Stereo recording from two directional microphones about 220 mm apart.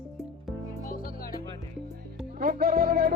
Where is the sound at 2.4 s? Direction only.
40° right (ahead or behind).